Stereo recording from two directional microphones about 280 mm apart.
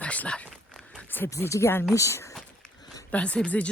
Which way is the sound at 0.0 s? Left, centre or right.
Centre.